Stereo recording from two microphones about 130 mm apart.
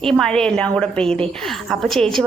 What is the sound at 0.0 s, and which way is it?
A woman's voice, 5° left (ahead or behind).